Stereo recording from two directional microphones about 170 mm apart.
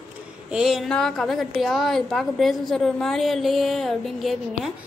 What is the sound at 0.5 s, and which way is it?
A woman's voice, 5° right (ahead or behind).